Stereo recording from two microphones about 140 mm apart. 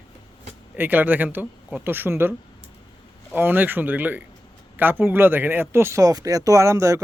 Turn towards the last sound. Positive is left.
turn(degrees=-20)  # may be behind; listen again after turning